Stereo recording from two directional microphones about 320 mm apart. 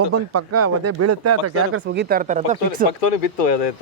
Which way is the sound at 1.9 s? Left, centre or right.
Right.